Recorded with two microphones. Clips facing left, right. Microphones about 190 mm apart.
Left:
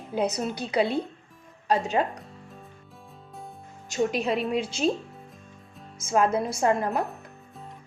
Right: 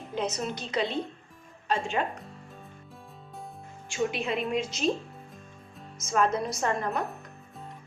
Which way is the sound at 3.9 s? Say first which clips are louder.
Left 4 dB; 40° left (ahead or behind).